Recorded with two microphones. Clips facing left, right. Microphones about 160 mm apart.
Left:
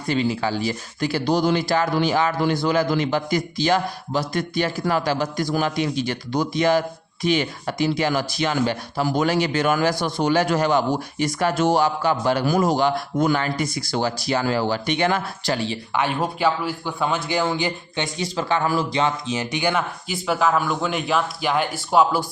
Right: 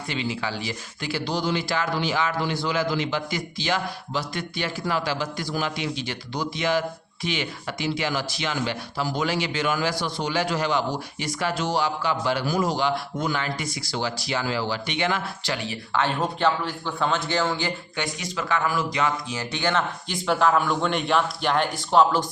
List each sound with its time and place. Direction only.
0.1 s speech: 40° left (ahead or behind)
15.9 s a man's voice: 10° left (ahead or behind)